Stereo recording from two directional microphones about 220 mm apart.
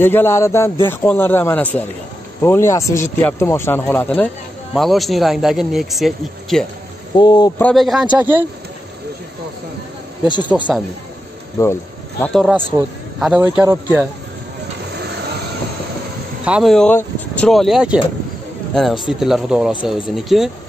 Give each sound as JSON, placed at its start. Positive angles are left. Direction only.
{"t": 0.0, "sound": "speech", "side_deg": 10}
{"t": 7.2, "sound": "speech", "side_deg": 20}
{"t": 7.6, "sound": "speech", "side_deg": 0}
{"t": 10.2, "sound": "speech", "side_deg": 20}
{"t": 11.5, "sound": "a sound", "side_deg": 10}
{"t": 12.3, "sound": "speech", "side_deg": 0}
{"t": 16.4, "sound": "speech", "side_deg": 0}